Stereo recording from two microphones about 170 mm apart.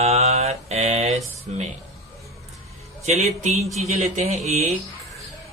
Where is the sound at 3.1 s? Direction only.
40° right (ahead or behind).